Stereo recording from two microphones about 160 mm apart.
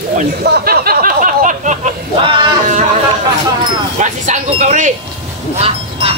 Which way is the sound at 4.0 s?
50° right (ahead or behind).